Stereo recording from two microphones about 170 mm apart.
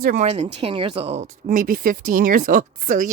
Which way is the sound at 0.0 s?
50° right (ahead or behind).